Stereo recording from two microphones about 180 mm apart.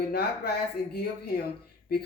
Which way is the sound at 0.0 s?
60° left (ahead or behind).